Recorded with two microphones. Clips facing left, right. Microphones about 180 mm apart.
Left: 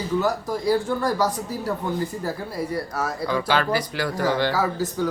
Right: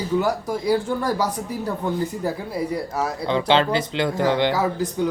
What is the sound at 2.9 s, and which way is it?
Speech, 25° right (ahead or behind).